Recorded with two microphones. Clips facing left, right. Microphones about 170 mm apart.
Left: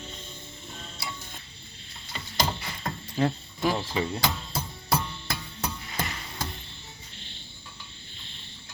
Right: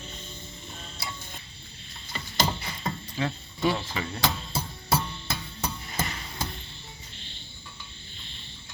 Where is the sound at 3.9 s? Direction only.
20° left (ahead or behind).